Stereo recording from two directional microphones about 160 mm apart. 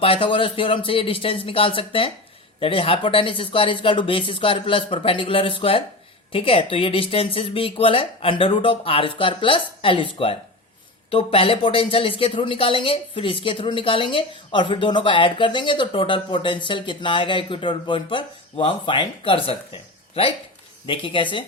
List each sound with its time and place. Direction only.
0.0 s speech: 35° left (ahead or behind)